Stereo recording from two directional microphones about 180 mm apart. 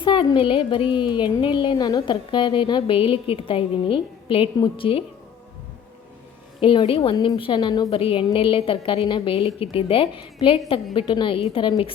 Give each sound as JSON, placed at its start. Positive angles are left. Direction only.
{"t": 0.0, "sound": "a woman's voice", "side_deg": 30}
{"t": 6.6, "sound": "a woman's voice", "side_deg": 30}